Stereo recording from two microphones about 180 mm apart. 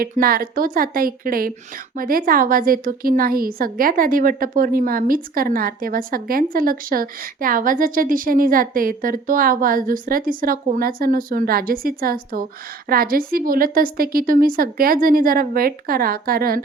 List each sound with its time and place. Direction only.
0.0 s a woman's voice: 55° right (ahead or behind)